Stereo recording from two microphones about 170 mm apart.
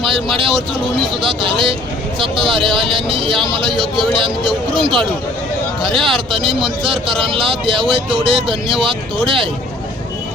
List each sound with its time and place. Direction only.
0.0 s a man's voice: 30° right (ahead or behind)
6.1 s a man's voice: 30° right (ahead or behind)